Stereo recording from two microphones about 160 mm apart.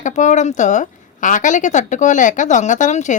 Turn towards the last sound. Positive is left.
turn(degrees=50)  # may be behind; listen again after turning